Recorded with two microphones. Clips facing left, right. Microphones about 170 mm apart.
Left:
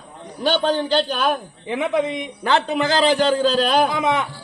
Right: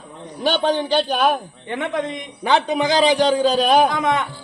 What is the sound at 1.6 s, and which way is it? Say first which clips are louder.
Speech: left 4 dB; 5° left (ahead or behind).